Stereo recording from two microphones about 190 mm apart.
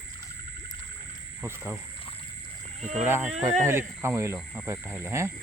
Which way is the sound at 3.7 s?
15° right (ahead or behind).